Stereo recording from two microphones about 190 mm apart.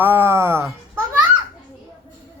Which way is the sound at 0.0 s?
10° right (ahead or behind).